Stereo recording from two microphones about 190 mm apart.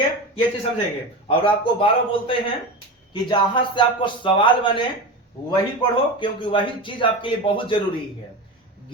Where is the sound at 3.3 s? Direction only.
25° left (ahead or behind).